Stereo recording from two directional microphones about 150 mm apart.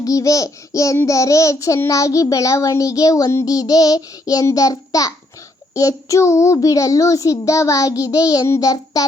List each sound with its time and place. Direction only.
0.0 s a child's voice: 20° left (ahead or behind)